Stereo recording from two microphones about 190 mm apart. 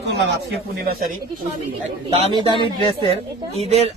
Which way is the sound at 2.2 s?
25° right (ahead or behind).